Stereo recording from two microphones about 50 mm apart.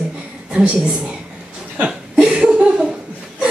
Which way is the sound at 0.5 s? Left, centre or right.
Centre.